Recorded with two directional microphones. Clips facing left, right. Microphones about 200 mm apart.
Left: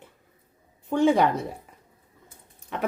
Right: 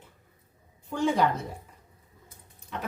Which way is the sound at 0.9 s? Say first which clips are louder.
Left 5 dB; 60° left (ahead or behind).